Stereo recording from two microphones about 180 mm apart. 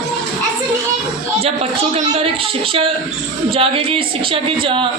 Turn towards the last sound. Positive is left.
turn(degrees=-30)  # may be behind; listen again after turning